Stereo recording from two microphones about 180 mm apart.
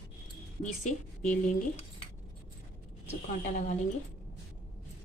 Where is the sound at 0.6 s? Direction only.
45° left (ahead or behind).